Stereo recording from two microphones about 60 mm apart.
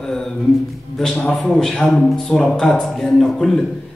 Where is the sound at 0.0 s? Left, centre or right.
Centre.